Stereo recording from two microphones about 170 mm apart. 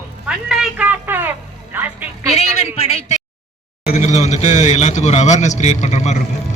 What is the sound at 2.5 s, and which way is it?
Speech, 35° left (ahead or behind).